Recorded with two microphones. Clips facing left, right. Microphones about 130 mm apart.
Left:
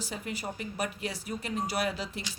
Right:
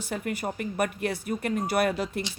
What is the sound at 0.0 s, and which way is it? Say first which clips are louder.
Speech: right 6 dB; 55° right (ahead or behind).